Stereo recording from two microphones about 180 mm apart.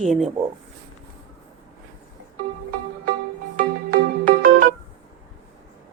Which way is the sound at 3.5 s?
50° right (ahead or behind).